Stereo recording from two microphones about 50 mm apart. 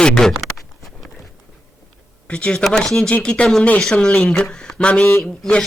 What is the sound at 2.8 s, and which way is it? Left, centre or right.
Speech, centre.